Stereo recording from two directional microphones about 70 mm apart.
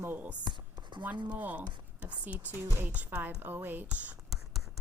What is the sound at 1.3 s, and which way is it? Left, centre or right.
Speech, right.